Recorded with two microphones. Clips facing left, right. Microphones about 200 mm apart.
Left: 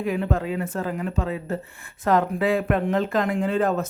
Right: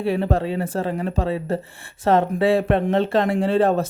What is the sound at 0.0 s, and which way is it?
Speech, 35° right (ahead or behind).